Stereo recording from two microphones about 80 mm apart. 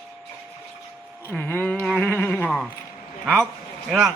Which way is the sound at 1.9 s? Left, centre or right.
Left.